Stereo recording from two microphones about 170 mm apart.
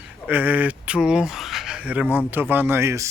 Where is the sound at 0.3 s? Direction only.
10° right (ahead or behind).